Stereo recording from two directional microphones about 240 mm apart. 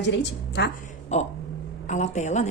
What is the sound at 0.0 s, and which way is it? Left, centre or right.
Speech, left.